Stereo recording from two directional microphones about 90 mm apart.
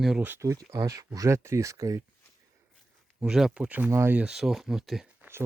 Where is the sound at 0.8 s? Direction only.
40° right (ahead or behind).